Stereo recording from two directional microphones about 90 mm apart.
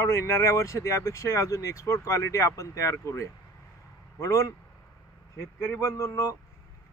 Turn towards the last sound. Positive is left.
turn(degrees=30)  # may be behind; listen again after turning